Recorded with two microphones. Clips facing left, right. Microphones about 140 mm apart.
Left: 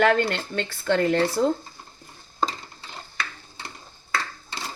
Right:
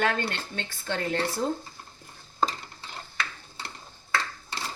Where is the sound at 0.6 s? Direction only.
90° left.